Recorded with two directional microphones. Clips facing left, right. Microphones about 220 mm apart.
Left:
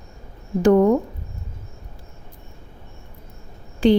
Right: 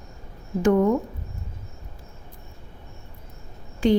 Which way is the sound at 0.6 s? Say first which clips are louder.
Left 4 dB; 35° left (ahead or behind).